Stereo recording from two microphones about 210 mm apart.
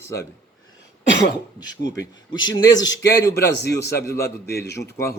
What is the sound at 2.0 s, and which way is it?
Speech, 20° left (ahead or behind).